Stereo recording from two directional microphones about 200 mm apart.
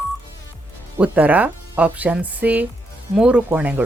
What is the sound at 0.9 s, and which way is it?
Speech, 10° right (ahead or behind).